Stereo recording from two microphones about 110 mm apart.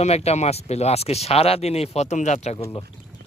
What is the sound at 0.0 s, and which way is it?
Speech, 70° left (ahead or behind).